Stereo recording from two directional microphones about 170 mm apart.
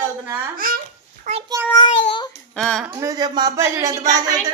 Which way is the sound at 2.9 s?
20° right (ahead or behind).